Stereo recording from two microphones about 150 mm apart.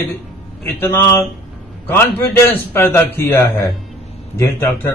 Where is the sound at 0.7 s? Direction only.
15° left (ahead or behind).